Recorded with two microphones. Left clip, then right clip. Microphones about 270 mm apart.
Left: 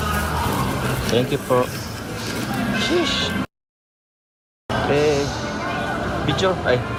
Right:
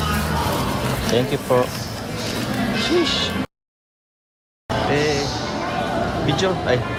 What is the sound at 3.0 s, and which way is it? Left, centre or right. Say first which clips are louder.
Speech: right 1 dB; centre.